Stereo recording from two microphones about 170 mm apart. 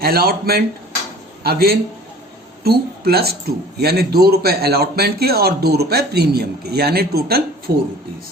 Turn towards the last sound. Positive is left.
turn(degrees=-65)  # may be behind; listen again after turning